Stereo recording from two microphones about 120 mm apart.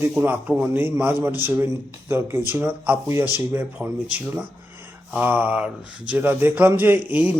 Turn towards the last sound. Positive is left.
turn(degrees=-10)  # may be behind; listen again after turning